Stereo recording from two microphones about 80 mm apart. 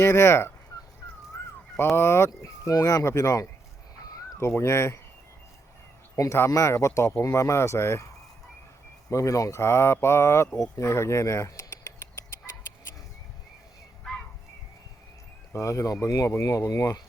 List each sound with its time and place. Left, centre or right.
0.0 s speech: left
2.0 s speech: left
6.1 s speech: left
9.0 s speech: left
10.6 s a sound: left
15.5 s speech: left